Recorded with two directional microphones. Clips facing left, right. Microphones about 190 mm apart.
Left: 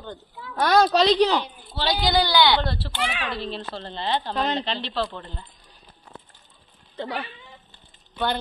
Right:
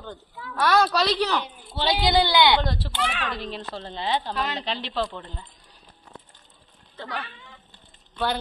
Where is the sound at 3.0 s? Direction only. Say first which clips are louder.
Even; 10° left (ahead or behind).